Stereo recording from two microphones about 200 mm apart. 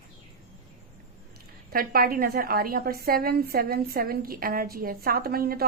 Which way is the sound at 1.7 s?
45° right (ahead or behind).